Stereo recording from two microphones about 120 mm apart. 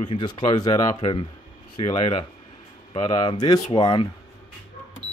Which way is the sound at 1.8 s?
45° left (ahead or behind).